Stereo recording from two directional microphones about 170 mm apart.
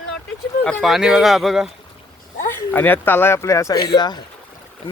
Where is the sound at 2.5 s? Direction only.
10° left (ahead or behind).